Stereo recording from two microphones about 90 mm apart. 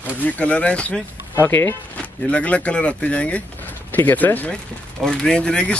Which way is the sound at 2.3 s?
15° left (ahead or behind).